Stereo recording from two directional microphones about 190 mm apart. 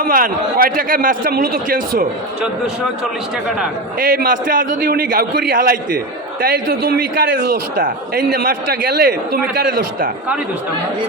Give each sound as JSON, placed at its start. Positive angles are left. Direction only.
{"t": 0.0, "sound": "a man's voice", "side_deg": -50}
{"t": 3.9, "sound": "a man's voice", "side_deg": -45}